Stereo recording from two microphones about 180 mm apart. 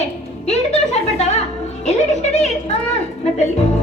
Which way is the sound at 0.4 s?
40° left (ahead or behind).